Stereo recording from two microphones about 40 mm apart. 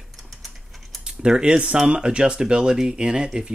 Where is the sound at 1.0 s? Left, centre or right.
Right.